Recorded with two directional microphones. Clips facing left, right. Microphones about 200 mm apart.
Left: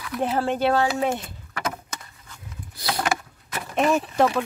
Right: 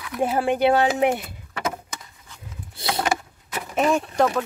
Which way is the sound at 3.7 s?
Centre (ahead or behind).